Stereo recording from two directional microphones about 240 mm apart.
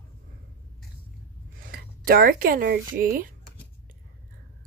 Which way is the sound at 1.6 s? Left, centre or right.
Right.